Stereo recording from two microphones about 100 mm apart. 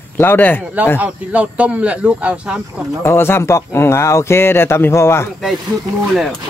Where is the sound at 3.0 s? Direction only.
25° left (ahead or behind).